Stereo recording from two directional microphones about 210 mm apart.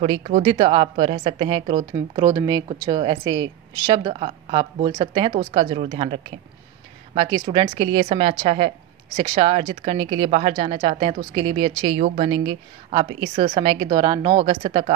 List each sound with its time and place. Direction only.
0.0 s a woman's voice: 30° right (ahead or behind)
5.3 s speech: 40° right (ahead or behind)
5.6 s a woman's voice: 25° right (ahead or behind)
7.2 s a woman's voice: 20° right (ahead or behind)